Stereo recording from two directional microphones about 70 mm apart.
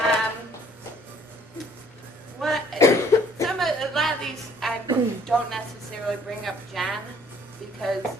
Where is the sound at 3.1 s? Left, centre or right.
Left.